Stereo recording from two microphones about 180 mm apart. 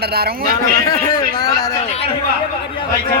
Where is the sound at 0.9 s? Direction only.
20° left (ahead or behind).